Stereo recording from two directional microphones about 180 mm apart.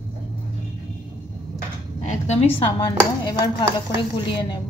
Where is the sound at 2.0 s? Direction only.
40° left (ahead or behind).